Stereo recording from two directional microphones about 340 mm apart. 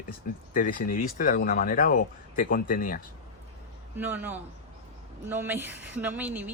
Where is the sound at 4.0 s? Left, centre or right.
Centre.